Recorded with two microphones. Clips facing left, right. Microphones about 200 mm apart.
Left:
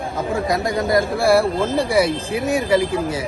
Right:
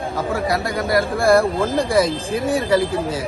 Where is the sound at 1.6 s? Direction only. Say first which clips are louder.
Even; 15° right (ahead or behind).